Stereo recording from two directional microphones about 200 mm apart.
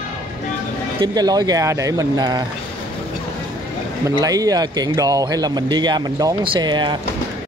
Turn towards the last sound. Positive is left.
turn(degrees=-20)  # may be behind; listen again after turning